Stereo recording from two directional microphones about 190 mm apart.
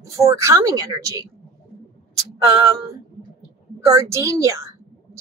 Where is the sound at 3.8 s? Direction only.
15° right (ahead or behind).